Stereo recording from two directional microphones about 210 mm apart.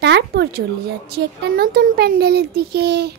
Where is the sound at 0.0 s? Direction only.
55° right (ahead or behind).